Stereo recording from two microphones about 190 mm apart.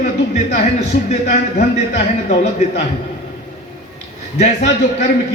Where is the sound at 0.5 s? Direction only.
35° left (ahead or behind).